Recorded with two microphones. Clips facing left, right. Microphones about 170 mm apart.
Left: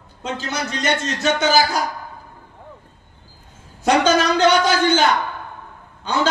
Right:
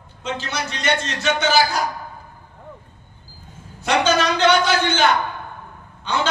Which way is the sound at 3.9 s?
40° left (ahead or behind).